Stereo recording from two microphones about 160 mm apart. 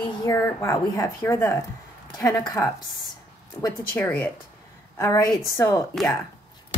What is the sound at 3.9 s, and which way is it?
A woman's voice, 10° left (ahead or behind).